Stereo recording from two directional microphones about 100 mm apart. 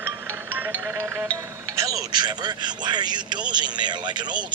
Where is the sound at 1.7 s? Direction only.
35° right (ahead or behind).